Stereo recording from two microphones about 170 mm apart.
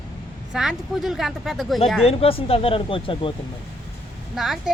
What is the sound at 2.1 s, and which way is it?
Speech, 35° left (ahead or behind).